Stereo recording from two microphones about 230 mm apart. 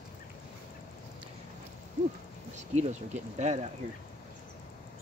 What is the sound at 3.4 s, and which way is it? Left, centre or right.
Speech, right.